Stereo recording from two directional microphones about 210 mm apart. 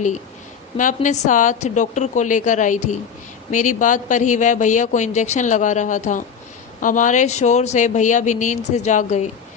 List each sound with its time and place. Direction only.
0.8 s a man's voice: 35° left (ahead or behind)